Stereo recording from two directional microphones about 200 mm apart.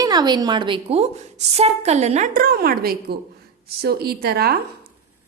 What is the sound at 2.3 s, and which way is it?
A woman's voice, 45° right (ahead or behind).